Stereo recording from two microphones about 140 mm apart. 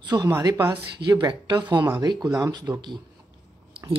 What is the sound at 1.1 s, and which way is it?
Speech, 35° right (ahead or behind).